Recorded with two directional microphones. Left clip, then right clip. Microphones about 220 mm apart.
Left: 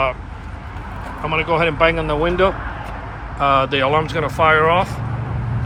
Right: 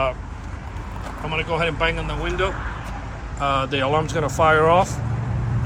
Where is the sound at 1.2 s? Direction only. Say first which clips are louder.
Left 6 dB; 10° right (ahead or behind).